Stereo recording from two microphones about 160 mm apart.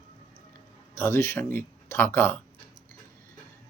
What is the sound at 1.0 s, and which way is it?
Speech, 15° left (ahead or behind).